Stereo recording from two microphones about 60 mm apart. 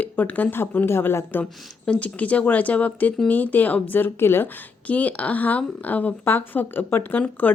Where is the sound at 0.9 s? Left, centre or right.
Left.